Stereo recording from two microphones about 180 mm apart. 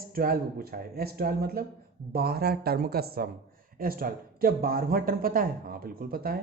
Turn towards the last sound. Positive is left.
turn(degrees=-55)  # may be behind; listen again after turning